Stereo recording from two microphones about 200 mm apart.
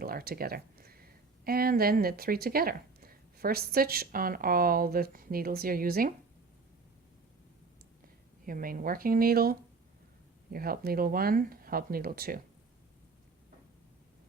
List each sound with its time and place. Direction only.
0.0 s a sound: 50° right (ahead or behind)
1.5 s speech: 50° right (ahead or behind)
8.4 s speech: 45° right (ahead or behind)